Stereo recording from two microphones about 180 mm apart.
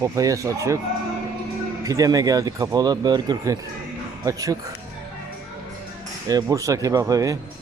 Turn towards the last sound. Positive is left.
turn(degrees=-20)  # may be behind; listen again after turning